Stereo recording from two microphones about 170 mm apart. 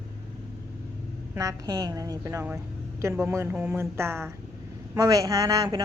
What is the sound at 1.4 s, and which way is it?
A woman's voice, 20° right (ahead or behind).